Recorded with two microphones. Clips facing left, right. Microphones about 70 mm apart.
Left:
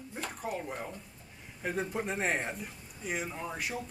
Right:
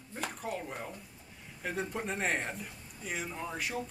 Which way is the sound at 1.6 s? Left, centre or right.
Centre.